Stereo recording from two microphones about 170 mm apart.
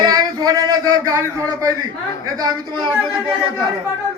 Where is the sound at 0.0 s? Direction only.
25° right (ahead or behind).